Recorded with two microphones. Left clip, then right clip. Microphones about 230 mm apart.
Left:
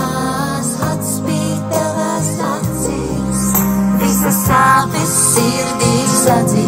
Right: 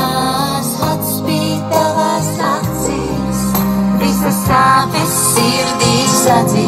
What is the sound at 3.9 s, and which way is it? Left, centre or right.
Music, left.